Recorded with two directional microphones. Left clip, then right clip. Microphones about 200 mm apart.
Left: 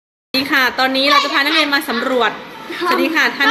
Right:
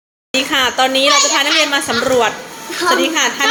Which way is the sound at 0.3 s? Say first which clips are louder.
Even; 5° left (ahead or behind).